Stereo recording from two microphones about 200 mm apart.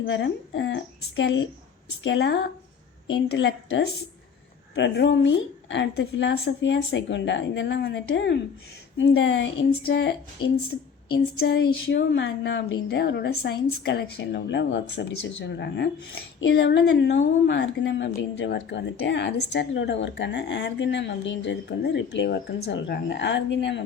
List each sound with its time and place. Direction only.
0.0 s speech: 65° left (ahead or behind)
4.9 s speech: 60° left (ahead or behind)
11.3 s speech: 55° left (ahead or behind)